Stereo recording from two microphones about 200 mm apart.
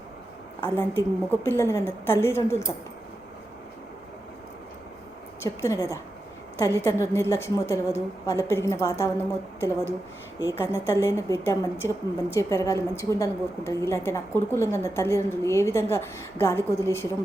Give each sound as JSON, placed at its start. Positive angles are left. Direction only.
{"t": 0.6, "sound": "a woman's voice", "side_deg": 10}
{"t": 5.4, "sound": "a woman's voice", "side_deg": 15}